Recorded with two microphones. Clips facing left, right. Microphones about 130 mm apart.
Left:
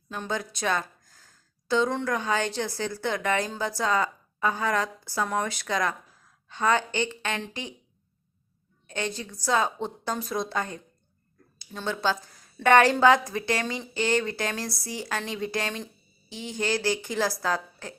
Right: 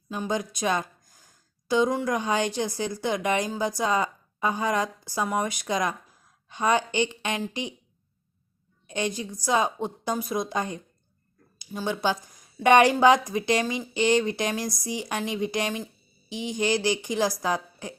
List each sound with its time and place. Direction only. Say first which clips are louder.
0.1 s a woman's voice: right 3 dB; 15° right (ahead or behind)
8.9 s speech: right 3 dB; 15° right (ahead or behind)